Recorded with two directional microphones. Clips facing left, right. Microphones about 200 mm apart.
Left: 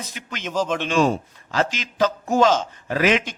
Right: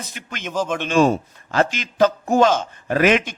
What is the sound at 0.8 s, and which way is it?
A man's voice, 45° right (ahead or behind).